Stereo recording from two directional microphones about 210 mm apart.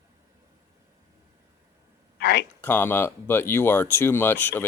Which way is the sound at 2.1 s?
50° left (ahead or behind).